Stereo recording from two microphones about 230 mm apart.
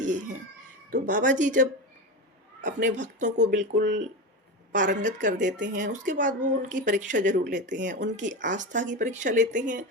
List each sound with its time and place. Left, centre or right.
0.0 s a sound: right
0.9 s speech: right
8.2 s a woman's voice: right
8.4 s speech: right